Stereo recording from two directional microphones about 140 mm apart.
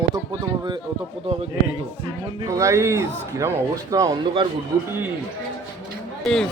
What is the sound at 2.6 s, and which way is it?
Speech, 20° right (ahead or behind).